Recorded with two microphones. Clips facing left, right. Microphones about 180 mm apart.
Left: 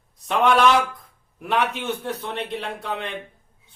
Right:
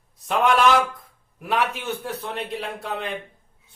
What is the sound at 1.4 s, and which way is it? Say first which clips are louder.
A man's voice: left 1 dB; centre (ahead or behind).